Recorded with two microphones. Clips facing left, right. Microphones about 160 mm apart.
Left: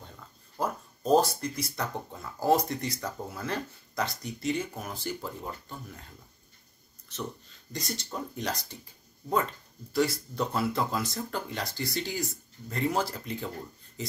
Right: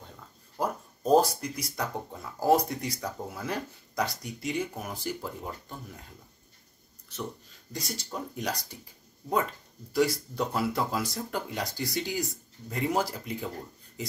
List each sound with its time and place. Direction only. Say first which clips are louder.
0.6 s speech: right 1 dB; 10° right (ahead or behind)
7.7 s speech: even; 10° right (ahead or behind)
9.9 s speech: right 1 dB; 15° right (ahead or behind)